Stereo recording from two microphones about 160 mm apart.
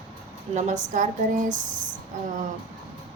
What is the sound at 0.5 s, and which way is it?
Speech, 50° right (ahead or behind).